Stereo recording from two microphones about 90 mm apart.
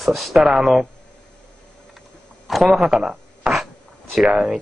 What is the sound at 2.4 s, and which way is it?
Speech, centre (ahead or behind).